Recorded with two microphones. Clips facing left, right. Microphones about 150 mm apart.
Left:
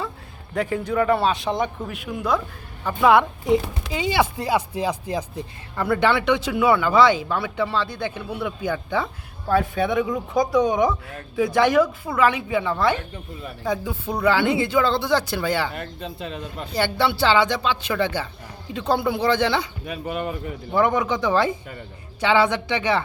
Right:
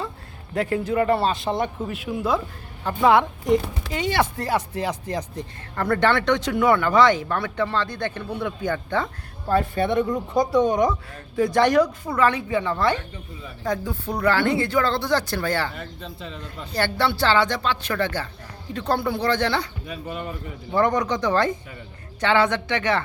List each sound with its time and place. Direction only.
0.5 s a woman's voice: 5° right (ahead or behind)
14.2 s speech: 15° left (ahead or behind)
15.7 s speech: 60° left (ahead or behind)
17.0 s speech: 5° left (ahead or behind)
17.3 s speech: 20° left (ahead or behind)
19.8 s speech: 70° left (ahead or behind)
20.7 s a woman's voice: 5° left (ahead or behind)